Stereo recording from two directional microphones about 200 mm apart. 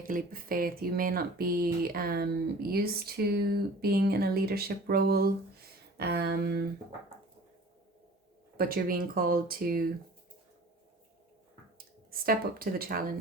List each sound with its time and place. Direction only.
0.1 s speech: 45° right (ahead or behind)
8.5 s speech: 45° right (ahead or behind)
12.1 s speech: 45° right (ahead or behind)